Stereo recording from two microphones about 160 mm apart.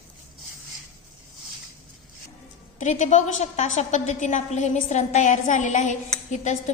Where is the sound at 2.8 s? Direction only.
50° left (ahead or behind).